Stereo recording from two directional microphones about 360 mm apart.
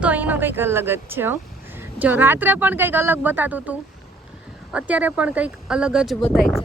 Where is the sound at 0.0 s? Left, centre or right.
Centre.